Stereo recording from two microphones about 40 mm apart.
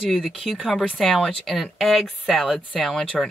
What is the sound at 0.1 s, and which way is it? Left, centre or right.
Speech, centre.